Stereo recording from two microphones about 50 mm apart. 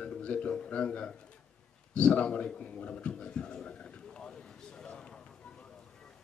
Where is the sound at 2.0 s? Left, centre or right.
Left.